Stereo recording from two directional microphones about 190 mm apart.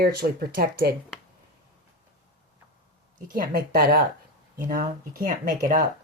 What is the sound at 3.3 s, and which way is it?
Speech, 50° right (ahead or behind).